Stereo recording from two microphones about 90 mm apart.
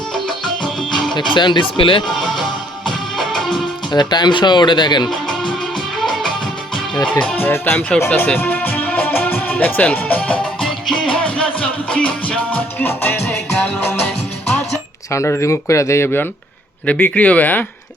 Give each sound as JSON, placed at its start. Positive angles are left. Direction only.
{"t": 0.1, "sound": "music", "side_deg": 5}
{"t": 1.3, "sound": "speech", "side_deg": 60}
{"t": 2.0, "sound": "music", "side_deg": 0}
{"t": 3.9, "sound": "speech", "side_deg": 55}
{"t": 5.0, "sound": "music", "side_deg": 5}
{"t": 6.7, "sound": "speech", "side_deg": 10}
{"t": 8.4, "sound": "music", "side_deg": 20}
{"t": 10.6, "sound": "music", "side_deg": 0}
{"t": 11.1, "sound": "music", "side_deg": 10}
{"t": 15.1, "sound": "speech", "side_deg": 30}
{"t": 16.8, "sound": "speech", "side_deg": 15}